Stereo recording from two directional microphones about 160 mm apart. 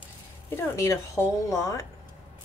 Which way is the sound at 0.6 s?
15° left (ahead or behind).